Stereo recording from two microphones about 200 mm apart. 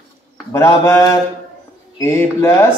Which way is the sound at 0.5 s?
15° left (ahead or behind).